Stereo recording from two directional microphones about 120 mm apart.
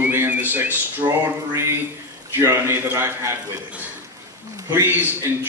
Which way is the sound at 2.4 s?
20° right (ahead or behind).